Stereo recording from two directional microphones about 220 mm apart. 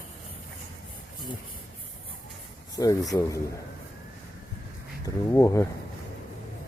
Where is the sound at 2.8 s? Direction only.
15° left (ahead or behind).